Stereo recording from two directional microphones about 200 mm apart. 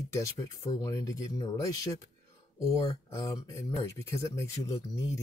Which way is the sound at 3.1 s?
15° left (ahead or behind).